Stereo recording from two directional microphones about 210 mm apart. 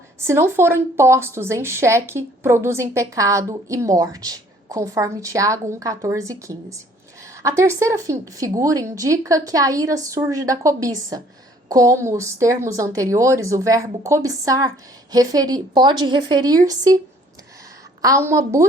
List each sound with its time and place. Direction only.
0.2 s a woman's voice: 10° right (ahead or behind)
18.0 s a woman's voice: 15° right (ahead or behind)